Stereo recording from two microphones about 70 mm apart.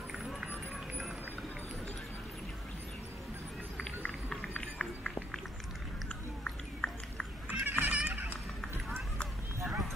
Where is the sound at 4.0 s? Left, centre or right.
Centre.